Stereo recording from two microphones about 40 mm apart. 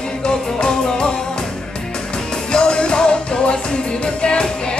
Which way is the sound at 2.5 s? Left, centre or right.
Left.